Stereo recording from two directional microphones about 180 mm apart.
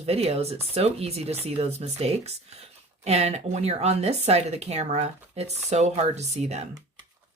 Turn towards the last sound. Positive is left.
turn(degrees=-40)  # may be behind; listen again after turning